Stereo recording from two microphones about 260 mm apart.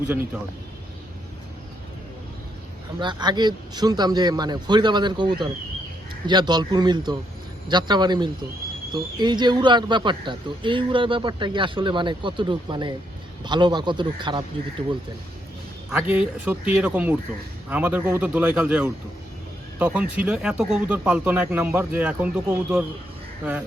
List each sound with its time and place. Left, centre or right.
3.0 s speech: centre
15.9 s speech: centre